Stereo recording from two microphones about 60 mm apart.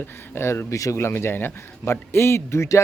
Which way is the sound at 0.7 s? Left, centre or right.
Left.